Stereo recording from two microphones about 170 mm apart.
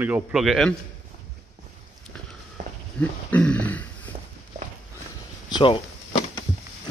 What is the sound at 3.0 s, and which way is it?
Speech, 10° left (ahead or behind).